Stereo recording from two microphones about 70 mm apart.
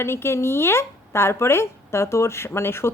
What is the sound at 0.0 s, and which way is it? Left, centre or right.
Speech, left.